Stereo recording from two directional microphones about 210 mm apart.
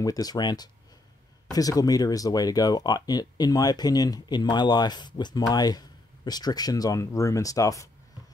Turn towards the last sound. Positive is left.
turn(degrees=15)  # may be behind; listen again after turning